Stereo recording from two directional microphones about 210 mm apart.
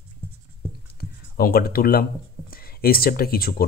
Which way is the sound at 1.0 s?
50° left (ahead or behind).